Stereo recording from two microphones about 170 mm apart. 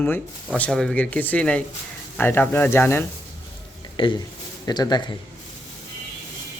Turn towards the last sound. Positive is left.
turn(degrees=25)  # may be behind; listen again after turning